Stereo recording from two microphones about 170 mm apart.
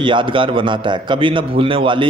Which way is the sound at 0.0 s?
30° right (ahead or behind).